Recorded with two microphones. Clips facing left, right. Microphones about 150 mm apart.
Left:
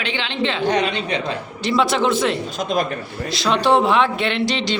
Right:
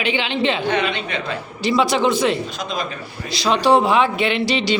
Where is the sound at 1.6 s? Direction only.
Centre (ahead or behind).